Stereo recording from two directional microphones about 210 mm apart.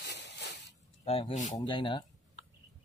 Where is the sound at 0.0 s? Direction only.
55° left (ahead or behind).